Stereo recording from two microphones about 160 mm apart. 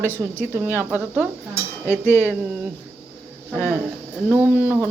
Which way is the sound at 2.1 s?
15° left (ahead or behind).